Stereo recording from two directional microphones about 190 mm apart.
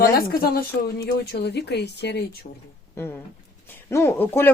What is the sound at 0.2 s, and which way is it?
Speech, 55° left (ahead or behind).